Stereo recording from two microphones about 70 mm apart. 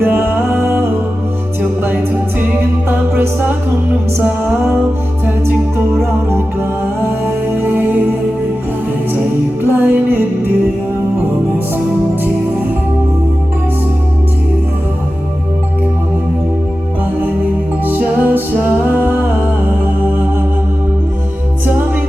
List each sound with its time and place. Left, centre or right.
0.0 s music: right
2.4 s music: right
5.2 s music: right
9.6 s music: right
17.8 s music: right